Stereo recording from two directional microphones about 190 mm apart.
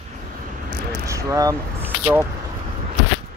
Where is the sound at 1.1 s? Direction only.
15° right (ahead or behind).